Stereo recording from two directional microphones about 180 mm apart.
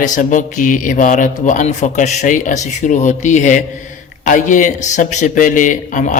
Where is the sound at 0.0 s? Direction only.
45° left (ahead or behind).